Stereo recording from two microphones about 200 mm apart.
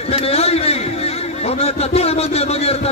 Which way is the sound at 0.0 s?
30° left (ahead or behind).